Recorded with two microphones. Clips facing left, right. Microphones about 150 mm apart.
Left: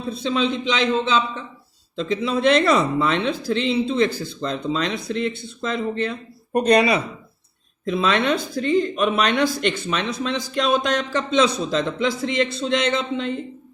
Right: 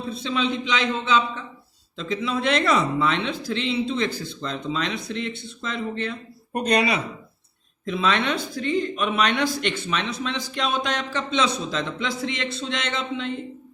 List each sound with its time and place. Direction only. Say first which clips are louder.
0.1 s speech: left 4 dB; 40° left (ahead or behind)